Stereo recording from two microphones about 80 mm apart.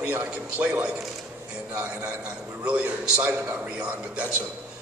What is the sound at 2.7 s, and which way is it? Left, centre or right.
A man's voice, centre.